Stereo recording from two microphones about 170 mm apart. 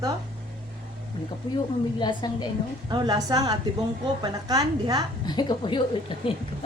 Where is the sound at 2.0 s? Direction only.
25° left (ahead or behind).